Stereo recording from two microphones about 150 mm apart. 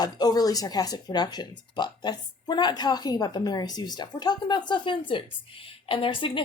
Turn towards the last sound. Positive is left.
turn(degrees=35)  # may be behind; listen again after turning